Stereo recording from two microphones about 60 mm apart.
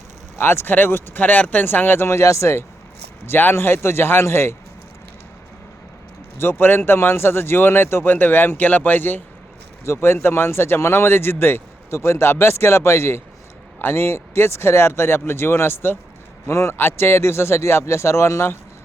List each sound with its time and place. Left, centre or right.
0.3 s speech: left
2.0 s speech: left
3.2 s speech: left
6.3 s speech: left
9.8 s speech: left